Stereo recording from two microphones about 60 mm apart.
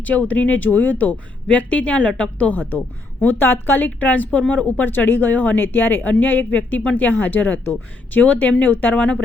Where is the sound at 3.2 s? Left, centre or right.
Left.